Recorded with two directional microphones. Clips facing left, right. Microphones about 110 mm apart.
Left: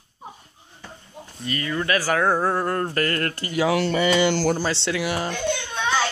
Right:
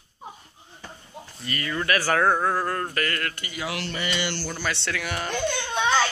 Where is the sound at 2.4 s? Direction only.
25° left (ahead or behind).